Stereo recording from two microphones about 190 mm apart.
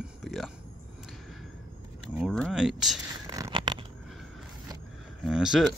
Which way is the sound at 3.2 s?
20° right (ahead or behind).